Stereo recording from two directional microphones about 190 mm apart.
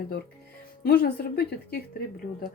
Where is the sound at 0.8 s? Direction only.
55° left (ahead or behind).